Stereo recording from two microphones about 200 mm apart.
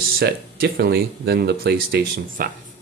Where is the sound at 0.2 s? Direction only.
50° right (ahead or behind).